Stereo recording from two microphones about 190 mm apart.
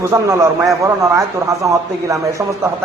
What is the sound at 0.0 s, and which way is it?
A woman's voice, 15° right (ahead or behind).